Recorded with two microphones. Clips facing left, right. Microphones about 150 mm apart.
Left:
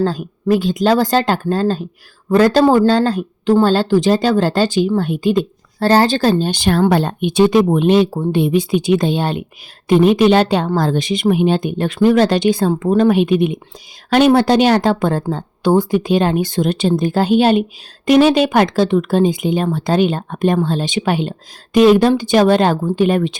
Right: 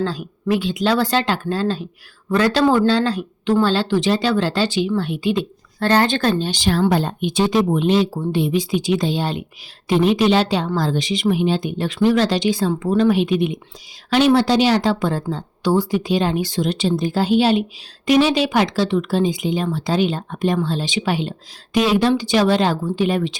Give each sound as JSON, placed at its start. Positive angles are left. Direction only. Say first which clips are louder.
{"t": 0.0, "sound": "speech", "louder": "left 5 dB", "side_deg": 45}
{"t": 6.5, "sound": "speech", "louder": "left 4 dB", "side_deg": 55}